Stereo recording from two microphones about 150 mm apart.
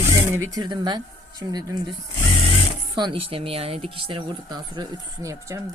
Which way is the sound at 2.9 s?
35° right (ahead or behind).